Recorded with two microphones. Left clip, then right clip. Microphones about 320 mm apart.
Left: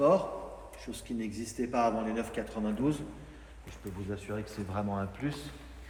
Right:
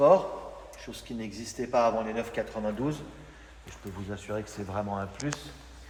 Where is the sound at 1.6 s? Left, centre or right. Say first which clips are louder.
Right 4 dB; centre.